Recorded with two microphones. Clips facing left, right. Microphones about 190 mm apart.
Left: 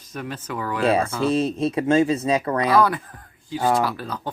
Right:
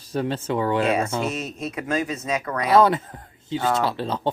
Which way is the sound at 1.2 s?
30° left (ahead or behind).